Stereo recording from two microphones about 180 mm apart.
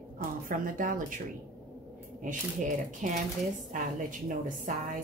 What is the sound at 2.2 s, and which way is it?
Speech, 45° right (ahead or behind).